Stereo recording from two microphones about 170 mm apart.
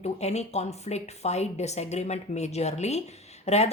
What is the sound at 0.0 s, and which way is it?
A woman's voice, 40° left (ahead or behind).